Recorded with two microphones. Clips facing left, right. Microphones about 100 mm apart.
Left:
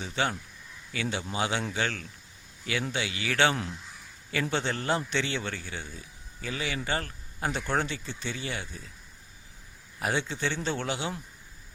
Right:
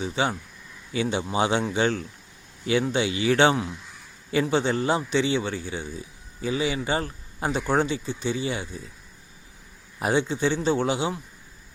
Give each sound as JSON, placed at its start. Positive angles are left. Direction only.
{"t": 0.0, "sound": "a man's voice", "side_deg": -15}
{"t": 10.0, "sound": "a man's voice", "side_deg": -20}